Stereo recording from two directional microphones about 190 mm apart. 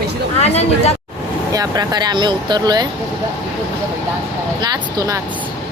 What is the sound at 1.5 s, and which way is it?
Speech, 20° right (ahead or behind).